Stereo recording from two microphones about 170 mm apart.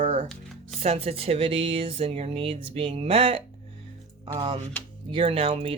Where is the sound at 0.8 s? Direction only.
35° right (ahead or behind).